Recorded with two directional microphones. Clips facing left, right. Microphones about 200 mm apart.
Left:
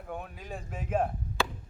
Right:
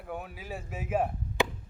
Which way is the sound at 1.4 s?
20° right (ahead or behind).